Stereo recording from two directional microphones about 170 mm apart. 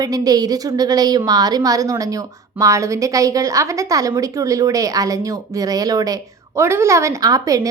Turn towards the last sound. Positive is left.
turn(degrees=-20)  # may be behind; listen again after turning